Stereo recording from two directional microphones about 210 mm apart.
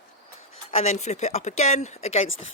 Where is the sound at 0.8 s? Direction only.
30° left (ahead or behind).